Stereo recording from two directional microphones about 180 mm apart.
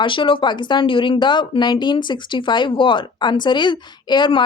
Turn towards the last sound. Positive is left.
turn(degrees=25)  # may be behind; listen again after turning